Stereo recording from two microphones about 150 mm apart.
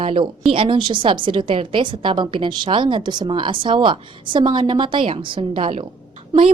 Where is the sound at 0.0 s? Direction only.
40° right (ahead or behind).